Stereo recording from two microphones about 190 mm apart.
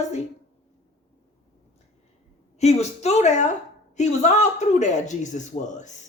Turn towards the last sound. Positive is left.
turn(degrees=40)  # may be behind; listen again after turning